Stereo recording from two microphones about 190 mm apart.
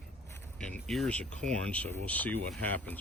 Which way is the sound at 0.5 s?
5° left (ahead or behind).